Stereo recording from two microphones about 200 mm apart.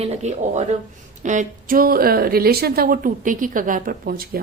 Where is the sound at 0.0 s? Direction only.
35° right (ahead or behind).